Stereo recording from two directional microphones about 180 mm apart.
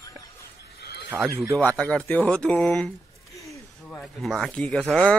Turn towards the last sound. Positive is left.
turn(degrees=5)  # may be behind; listen again after turning